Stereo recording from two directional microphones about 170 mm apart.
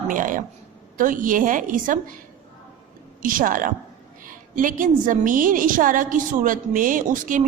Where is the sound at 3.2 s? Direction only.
50° right (ahead or behind).